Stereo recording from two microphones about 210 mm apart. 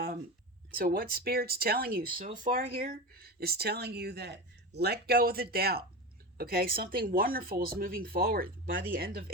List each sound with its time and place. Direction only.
0.7 s speech: 45° right (ahead or behind)